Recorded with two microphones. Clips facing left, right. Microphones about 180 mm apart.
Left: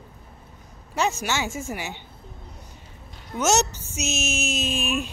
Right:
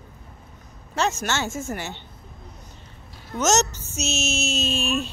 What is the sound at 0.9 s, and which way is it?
A woman's voice, 10° left (ahead or behind).